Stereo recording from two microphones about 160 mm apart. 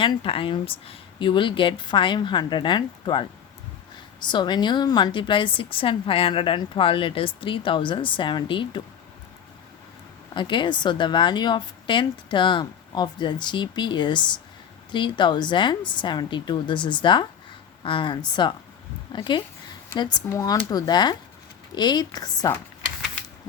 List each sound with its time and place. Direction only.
0.0 s a woman's voice: 30° left (ahead or behind)
10.3 s a woman's voice: 30° left (ahead or behind)